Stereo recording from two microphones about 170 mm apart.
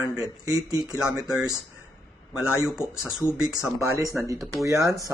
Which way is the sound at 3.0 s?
5° right (ahead or behind).